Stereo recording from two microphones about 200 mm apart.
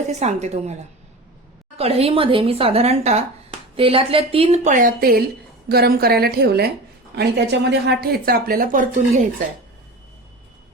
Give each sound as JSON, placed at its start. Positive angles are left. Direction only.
{"t": 0.1, "sound": "a woman's voice", "side_deg": -35}
{"t": 1.8, "sound": "speech", "side_deg": -30}